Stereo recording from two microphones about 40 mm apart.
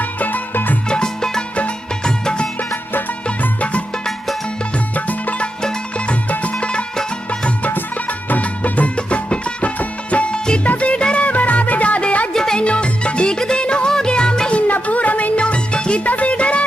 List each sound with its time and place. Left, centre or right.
0.0 s music: left
0.9 s music: centre
3.4 s music: left
4.9 s music: left
7.7 s music of bollywood: left
10.6 s music: left
12.3 s music: centre
12.6 s music: left
14.5 s music: left
16.0 s music: left